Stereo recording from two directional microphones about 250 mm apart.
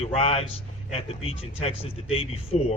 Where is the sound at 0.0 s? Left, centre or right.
Left.